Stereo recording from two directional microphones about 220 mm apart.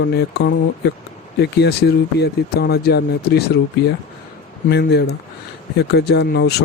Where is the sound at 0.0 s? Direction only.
50° left (ahead or behind).